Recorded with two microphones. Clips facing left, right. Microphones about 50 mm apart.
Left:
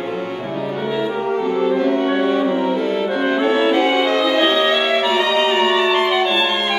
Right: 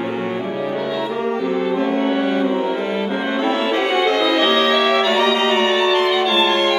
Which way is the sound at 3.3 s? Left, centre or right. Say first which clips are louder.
Left 3 dB; left.